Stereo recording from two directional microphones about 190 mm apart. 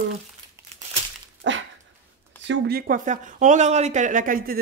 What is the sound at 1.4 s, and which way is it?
Dog, 75° right (ahead or behind).